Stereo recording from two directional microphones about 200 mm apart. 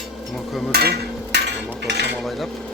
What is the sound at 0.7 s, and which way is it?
Hammer, 50° right (ahead or behind).